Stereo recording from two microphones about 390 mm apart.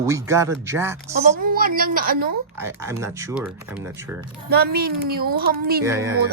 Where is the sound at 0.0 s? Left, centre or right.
Centre.